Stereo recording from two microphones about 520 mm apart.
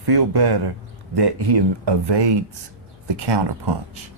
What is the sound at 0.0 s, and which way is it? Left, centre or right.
Speech, right.